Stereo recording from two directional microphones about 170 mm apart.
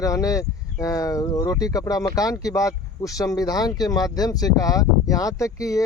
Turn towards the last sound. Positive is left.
turn(degrees=20)  # may be behind; listen again after turning